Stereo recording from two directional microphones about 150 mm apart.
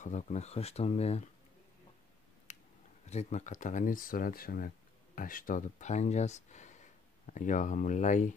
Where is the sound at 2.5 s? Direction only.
50° left (ahead or behind).